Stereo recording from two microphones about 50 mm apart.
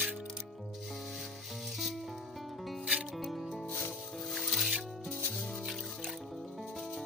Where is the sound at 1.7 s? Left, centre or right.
Centre.